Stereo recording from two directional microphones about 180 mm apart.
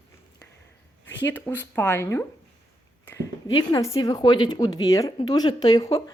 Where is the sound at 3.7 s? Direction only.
20° left (ahead or behind).